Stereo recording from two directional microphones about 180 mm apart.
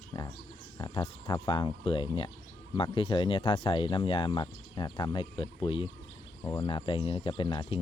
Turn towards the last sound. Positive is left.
turn(degrees=25)  # may be behind; listen again after turning